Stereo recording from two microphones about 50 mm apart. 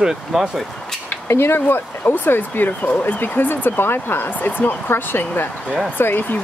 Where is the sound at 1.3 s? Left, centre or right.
Left.